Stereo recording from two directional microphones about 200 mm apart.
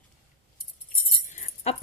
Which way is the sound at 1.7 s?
30° left (ahead or behind).